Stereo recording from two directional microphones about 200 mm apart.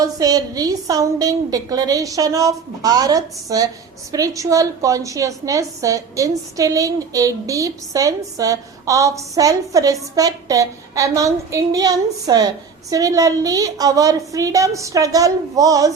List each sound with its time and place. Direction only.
0.0 s a woman's voice: 20° right (ahead or behind)